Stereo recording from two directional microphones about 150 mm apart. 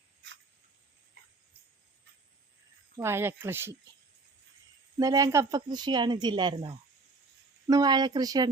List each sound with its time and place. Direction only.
3.0 s speech: 15° right (ahead or behind)
4.9 s a woman's voice: 25° right (ahead or behind)